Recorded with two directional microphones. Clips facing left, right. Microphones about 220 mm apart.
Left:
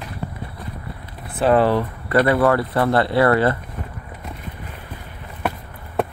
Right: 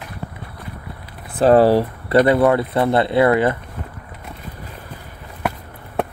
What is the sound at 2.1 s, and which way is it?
Speech, 20° right (ahead or behind).